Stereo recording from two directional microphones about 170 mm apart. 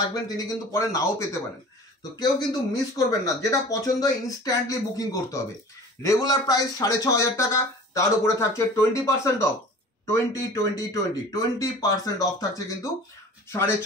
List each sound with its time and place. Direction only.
0.1 s speech: 20° left (ahead or behind)